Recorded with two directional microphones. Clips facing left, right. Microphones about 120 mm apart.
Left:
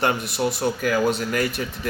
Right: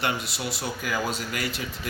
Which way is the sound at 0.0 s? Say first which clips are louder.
Left 7 dB; 50° left (ahead or behind).